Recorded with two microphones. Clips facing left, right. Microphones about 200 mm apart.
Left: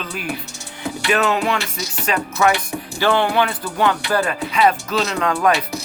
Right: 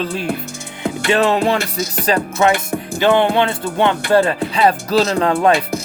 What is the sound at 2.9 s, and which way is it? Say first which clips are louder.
Music: right 4 dB; 20° right (ahead or behind).